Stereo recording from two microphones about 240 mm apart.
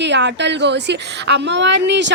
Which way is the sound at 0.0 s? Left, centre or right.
Right.